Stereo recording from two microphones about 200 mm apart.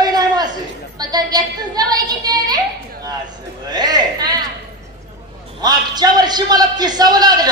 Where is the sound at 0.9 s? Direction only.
20° right (ahead or behind).